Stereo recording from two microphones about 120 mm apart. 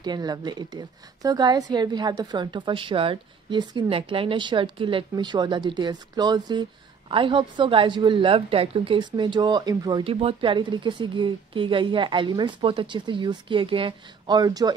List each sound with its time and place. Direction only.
0.0 s a woman's voice: 35° right (ahead or behind)
10.0 s a woman's voice: 50° right (ahead or behind); by 14.7 s 35° right (ahead or behind)